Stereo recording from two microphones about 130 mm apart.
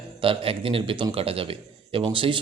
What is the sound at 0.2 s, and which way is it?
Speech, 45° right (ahead or behind).